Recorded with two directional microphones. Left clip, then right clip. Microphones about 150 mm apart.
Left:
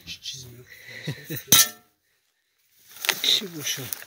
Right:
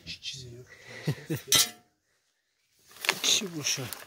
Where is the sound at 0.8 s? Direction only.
20° right (ahead or behind).